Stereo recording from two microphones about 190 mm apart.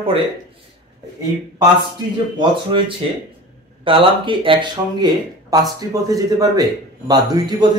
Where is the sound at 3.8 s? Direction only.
25° right (ahead or behind).